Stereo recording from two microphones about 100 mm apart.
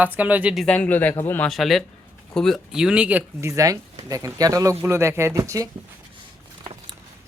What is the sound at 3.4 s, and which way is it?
Speech, 30° right (ahead or behind).